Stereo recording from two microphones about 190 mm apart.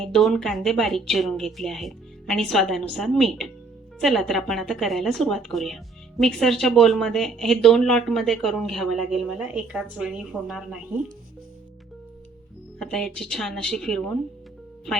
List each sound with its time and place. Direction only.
0.0 s a woman's voice: centre (ahead or behind)
12.8 s a woman's voice: 5° left (ahead or behind)